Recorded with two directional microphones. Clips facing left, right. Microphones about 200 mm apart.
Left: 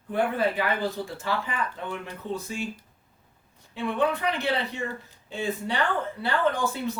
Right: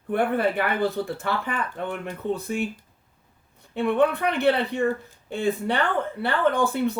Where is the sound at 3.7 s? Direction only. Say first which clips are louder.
Right 5 dB; 60° right (ahead or behind).